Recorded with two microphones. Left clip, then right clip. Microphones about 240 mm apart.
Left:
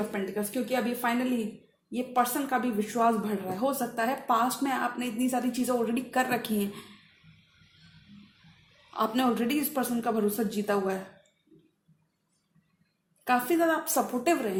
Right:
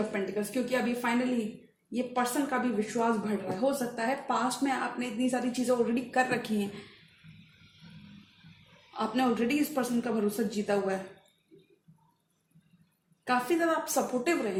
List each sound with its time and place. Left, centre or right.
0.1 s a woman's voice: left
8.9 s a woman's voice: left
13.2 s a woman's voice: left